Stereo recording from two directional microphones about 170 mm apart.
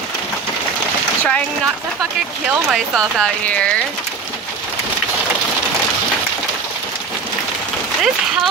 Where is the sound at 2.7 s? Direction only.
5° left (ahead or behind).